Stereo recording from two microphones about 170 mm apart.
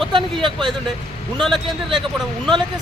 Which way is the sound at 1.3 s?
5° left (ahead or behind).